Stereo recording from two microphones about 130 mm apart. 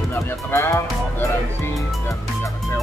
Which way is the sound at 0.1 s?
20° left (ahead or behind).